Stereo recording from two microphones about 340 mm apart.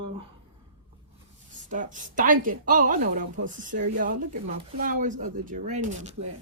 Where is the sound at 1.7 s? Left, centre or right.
Right.